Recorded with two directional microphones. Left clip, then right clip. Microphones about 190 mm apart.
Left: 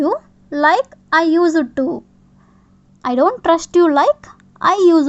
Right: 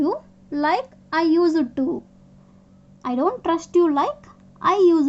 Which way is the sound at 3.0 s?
35° left (ahead or behind).